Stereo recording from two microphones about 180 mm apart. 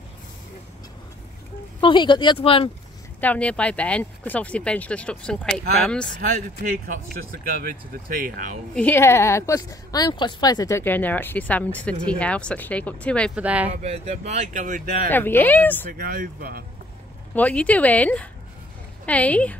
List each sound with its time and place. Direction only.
1.8 s speech: 25° left (ahead or behind)
3.2 s a woman's voice: 10° left (ahead or behind)
7.4 s speech: 50° right (ahead or behind)
8.7 s a woman's voice: 10° left (ahead or behind)
13.3 s speech: 10° right (ahead or behind)
13.8 s speech: 35° right (ahead or behind)
15.0 s a woman's voice: 10° left (ahead or behind)
15.9 s speech: 55° right (ahead or behind)
17.3 s a woman's voice: 10° left (ahead or behind)